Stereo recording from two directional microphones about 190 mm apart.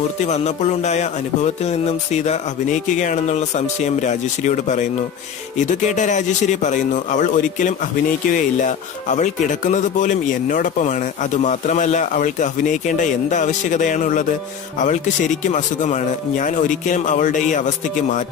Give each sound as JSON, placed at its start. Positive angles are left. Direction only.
{"t": 0.3, "sound": "speech", "side_deg": 35}